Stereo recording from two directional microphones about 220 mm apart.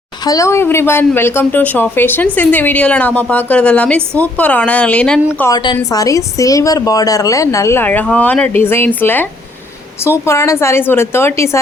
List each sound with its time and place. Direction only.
0.3 s a woman's voice: 15° left (ahead or behind)
5.4 s a woman's voice: 15° left (ahead or behind)